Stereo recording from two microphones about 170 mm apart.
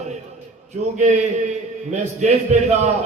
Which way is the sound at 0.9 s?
45° right (ahead or behind).